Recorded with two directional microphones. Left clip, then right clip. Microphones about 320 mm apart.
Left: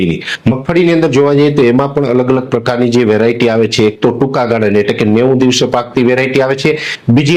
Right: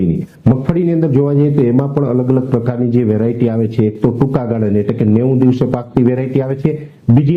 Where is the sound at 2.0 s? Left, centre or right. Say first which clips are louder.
Left 4 dB; centre.